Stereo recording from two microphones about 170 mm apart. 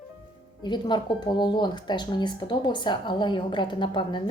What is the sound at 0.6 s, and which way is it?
Speech, 25° left (ahead or behind).